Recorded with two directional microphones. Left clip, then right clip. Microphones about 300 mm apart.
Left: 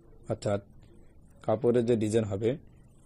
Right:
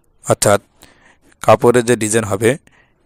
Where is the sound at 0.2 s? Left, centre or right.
Right.